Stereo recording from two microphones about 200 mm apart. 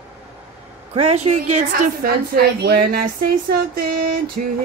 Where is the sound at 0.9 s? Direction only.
35° right (ahead or behind); by 3.0 s 50° right (ahead or behind).